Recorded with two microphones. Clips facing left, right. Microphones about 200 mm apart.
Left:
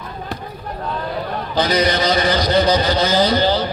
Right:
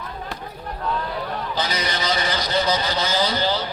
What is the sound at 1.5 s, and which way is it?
A man's voice, 60° left (ahead or behind).